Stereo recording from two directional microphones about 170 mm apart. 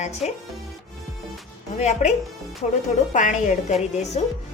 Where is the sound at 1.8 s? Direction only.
40° left (ahead or behind).